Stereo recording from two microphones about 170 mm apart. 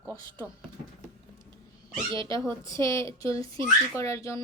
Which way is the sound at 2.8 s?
15° left (ahead or behind).